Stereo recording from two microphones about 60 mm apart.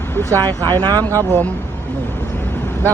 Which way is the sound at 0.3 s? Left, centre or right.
Left.